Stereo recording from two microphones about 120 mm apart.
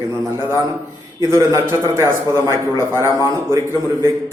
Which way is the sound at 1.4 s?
25° right (ahead or behind).